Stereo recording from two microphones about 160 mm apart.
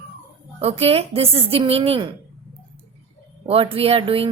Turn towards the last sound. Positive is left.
turn(degrees=-35)  # may be behind; listen again after turning